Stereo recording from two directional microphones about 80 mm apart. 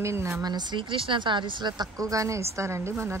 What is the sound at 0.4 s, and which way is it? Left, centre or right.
Speech, right.